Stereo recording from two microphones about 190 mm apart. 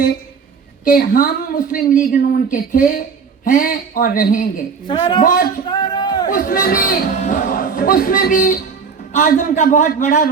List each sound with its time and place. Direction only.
0.9 s speech: 50° left (ahead or behind)
4.9 s a woman's voice: 25° left (ahead or behind)
5.2 s speech: 45° left (ahead or behind)
5.7 s a sound: 20° left (ahead or behind)
6.2 s speech: 45° left (ahead or behind)